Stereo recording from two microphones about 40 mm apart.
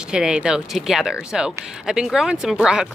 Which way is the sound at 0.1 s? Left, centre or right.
Right.